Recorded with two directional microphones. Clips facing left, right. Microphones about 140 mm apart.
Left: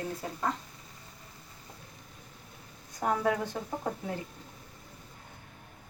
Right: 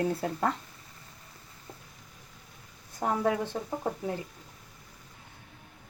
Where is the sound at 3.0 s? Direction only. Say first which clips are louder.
Even; 20° right (ahead or behind).